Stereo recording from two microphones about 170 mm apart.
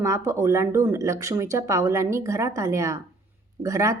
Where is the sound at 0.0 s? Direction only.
15° right (ahead or behind).